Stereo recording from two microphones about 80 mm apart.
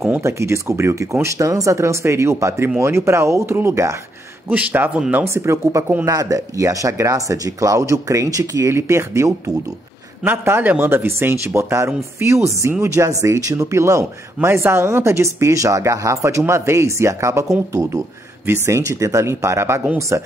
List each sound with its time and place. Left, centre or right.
0.2 s speech: right
4.5 s speech: right
5.3 s speech: right